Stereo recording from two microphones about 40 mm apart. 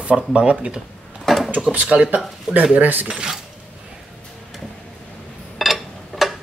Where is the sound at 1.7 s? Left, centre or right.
Right.